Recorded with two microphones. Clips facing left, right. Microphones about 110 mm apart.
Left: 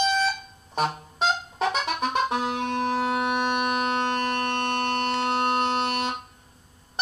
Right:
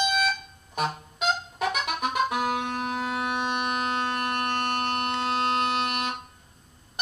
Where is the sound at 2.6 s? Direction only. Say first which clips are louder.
Left 5 dB; 55° left (ahead or behind).